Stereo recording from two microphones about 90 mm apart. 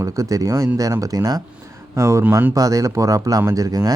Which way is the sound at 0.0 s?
40° right (ahead or behind).